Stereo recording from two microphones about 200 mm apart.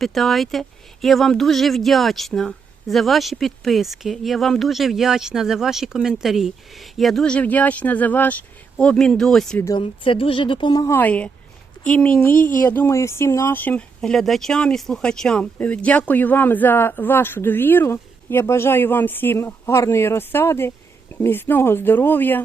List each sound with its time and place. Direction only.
0.0 s speech: centre (ahead or behind)
9.6 s a woman's voice: 25° left (ahead or behind)